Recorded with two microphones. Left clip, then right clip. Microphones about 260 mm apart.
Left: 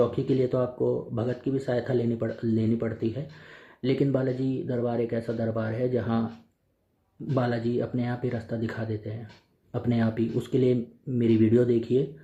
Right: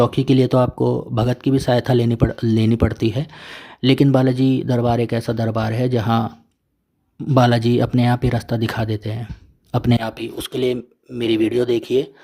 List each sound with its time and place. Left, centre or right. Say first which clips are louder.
0.0 s speech: right 8 dB; right
7.3 s speech: right 11 dB; right